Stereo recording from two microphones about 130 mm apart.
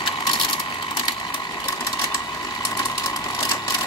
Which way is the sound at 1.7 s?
25° left (ahead or behind).